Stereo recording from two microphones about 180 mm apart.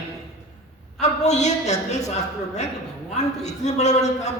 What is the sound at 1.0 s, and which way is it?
A woman's voice, 40° left (ahead or behind).